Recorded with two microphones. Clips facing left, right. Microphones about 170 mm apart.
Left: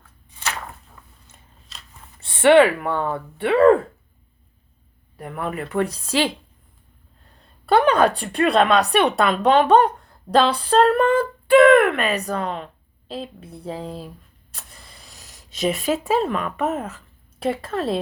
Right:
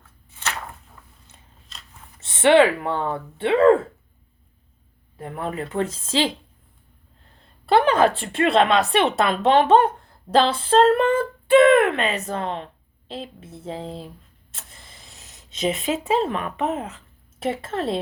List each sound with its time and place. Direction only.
2.2 s speech: 25° right (ahead or behind)
5.1 s speech: 30° right (ahead or behind)
7.7 s speech: 25° right (ahead or behind)
14.5 s a sound: 25° right (ahead or behind)
15.9 s speech: 25° right (ahead or behind)
17.4 s speech: 25° right (ahead or behind)